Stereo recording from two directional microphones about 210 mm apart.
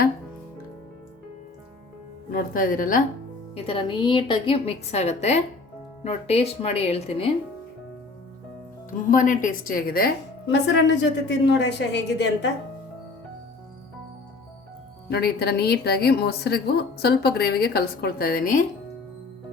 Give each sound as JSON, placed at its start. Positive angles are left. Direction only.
{"t": 2.3, "sound": "speech", "side_deg": 40}
{"t": 3.5, "sound": "a woman's voice", "side_deg": 25}
{"t": 9.0, "sound": "a woman's voice", "side_deg": 40}
{"t": 15.1, "sound": "a woman's voice", "side_deg": 50}